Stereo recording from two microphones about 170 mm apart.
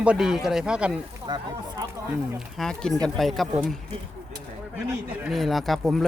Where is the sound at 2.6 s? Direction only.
5° left (ahead or behind).